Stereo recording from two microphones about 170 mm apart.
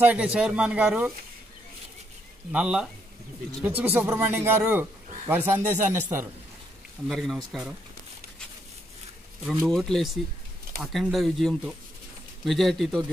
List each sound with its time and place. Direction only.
0.0 s speech: 5° right (ahead or behind)
2.5 s speech: 5° right (ahead or behind)
7.1 s speech: centre (ahead or behind)
9.4 s speech: centre (ahead or behind)